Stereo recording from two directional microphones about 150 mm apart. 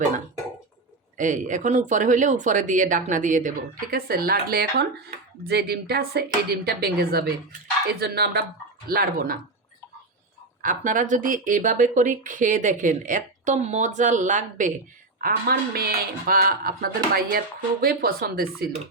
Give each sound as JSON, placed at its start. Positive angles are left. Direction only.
{"t": 1.1, "sound": "speech", "side_deg": -55}
{"t": 3.9, "sound": "speech", "side_deg": -80}
{"t": 8.9, "sound": "speech", "side_deg": -80}
{"t": 10.6, "sound": "speech", "side_deg": -60}
{"t": 15.2, "sound": "speech", "side_deg": -90}